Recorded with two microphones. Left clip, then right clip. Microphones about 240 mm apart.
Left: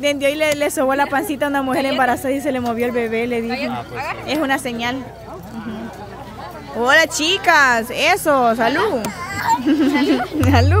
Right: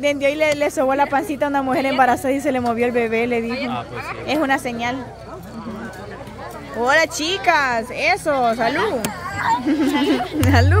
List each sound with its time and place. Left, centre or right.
0.0 s a woman's voice: centre
6.8 s a woman's voice: centre
9.3 s a sound: left
9.7 s a woman's voice: centre